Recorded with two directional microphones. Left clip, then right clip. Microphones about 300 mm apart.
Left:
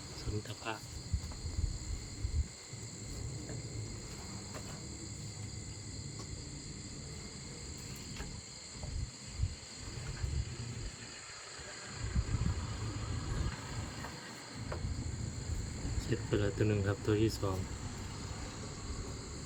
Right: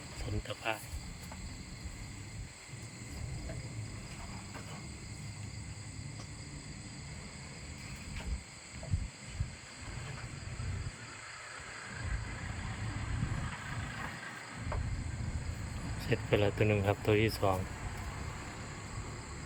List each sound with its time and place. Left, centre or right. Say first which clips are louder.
0.4 s speech: right 7 dB; centre
16.0 s speech: right 5 dB; centre